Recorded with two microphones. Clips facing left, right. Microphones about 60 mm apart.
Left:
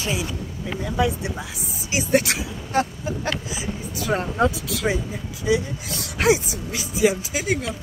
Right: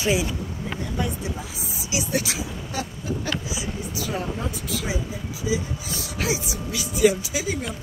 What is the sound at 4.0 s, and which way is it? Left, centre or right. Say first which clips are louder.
Speech: left 7 dB; left.